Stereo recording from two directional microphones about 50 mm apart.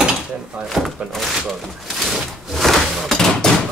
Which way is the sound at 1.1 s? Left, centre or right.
Centre.